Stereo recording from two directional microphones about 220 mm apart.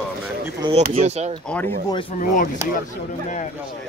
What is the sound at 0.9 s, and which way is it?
Speech, 30° right (ahead or behind).